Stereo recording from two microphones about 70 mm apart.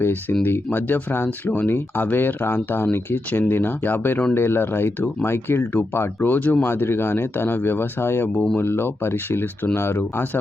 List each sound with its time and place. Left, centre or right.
0.0 s speech: left